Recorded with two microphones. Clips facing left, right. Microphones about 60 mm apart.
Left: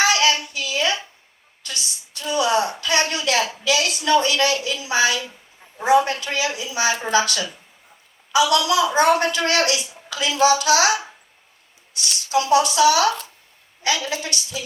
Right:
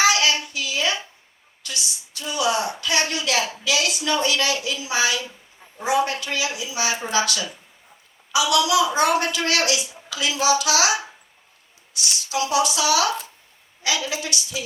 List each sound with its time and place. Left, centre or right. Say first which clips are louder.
0.0 s child singing: left 1 dB; left
1.6 s a sound: even; left
5.8 s a woman's voice: left 5 dB; left
11.9 s a woman's voice: left 4 dB; left